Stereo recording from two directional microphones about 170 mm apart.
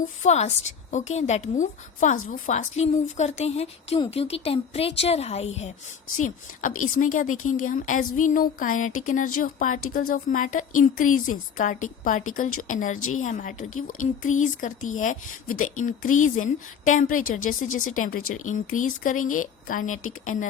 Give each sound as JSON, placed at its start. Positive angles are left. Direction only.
{"t": 0.2, "sound": "a woman's voice", "side_deg": 40}
{"t": 6.2, "sound": "a woman's voice", "side_deg": 50}